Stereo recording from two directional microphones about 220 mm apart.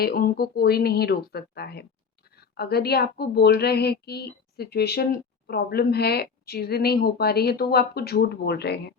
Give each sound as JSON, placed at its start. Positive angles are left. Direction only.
{"t": 0.0, "sound": "a woman's voice", "side_deg": 45}